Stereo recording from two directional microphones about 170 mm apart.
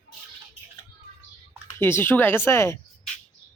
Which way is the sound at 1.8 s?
15° left (ahead or behind).